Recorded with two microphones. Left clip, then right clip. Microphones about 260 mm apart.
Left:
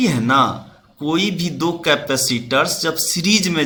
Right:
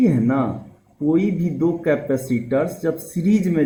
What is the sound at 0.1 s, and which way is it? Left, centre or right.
Speech, left.